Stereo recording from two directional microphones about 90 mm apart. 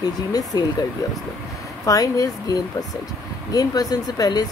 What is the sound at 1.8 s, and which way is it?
Speech, 40° left (ahead or behind).